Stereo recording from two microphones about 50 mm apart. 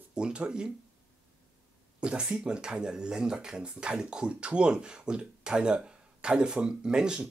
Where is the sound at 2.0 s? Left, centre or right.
Right.